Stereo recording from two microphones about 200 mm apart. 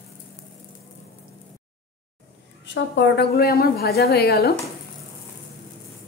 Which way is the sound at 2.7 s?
60° left (ahead or behind).